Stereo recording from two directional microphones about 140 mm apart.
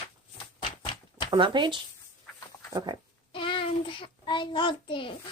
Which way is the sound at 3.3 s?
40° left (ahead or behind).